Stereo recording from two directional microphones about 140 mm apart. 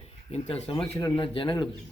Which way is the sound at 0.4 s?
45° left (ahead or behind).